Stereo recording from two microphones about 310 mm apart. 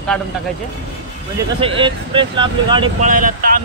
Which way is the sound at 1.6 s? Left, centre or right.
Centre.